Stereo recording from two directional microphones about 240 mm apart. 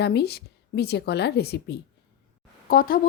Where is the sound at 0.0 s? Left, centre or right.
Left.